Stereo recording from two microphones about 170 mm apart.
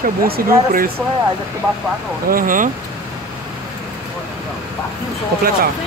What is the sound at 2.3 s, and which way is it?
Speech, 55° right (ahead or behind).